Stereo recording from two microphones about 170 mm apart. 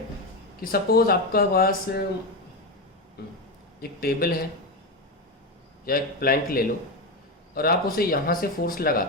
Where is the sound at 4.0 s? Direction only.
60° left (ahead or behind).